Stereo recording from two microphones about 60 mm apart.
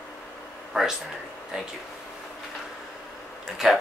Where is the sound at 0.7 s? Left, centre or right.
Centre.